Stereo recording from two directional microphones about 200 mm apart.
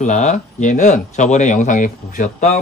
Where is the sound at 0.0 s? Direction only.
35° left (ahead or behind).